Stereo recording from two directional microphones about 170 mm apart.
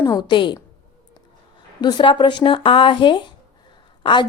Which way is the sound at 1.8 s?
25° left (ahead or behind).